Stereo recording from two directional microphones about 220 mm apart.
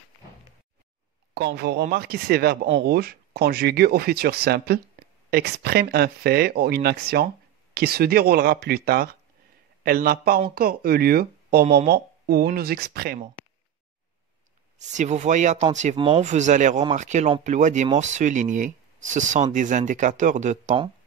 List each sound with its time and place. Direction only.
1.3 s speech: 45° right (ahead or behind)
14.8 s speech: 35° right (ahead or behind)